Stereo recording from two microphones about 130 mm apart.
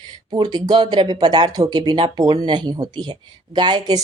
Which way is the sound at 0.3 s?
30° right (ahead or behind).